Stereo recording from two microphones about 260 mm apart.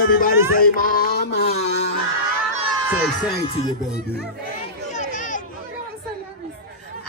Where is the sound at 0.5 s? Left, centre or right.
Left.